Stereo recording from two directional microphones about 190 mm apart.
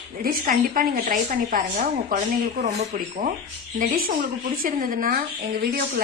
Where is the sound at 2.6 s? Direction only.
35° right (ahead or behind).